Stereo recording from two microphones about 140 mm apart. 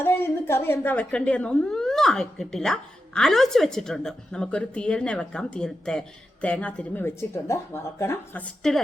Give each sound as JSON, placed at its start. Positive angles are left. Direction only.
{"t": 0.0, "sound": "a woman's voice", "side_deg": 15}